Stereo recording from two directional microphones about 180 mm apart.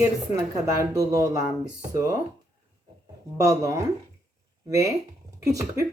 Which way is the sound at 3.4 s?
15° right (ahead or behind).